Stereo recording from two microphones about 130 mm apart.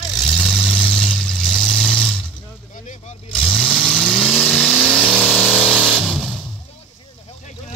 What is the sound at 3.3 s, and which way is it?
Vehicle, 5° left (ahead or behind).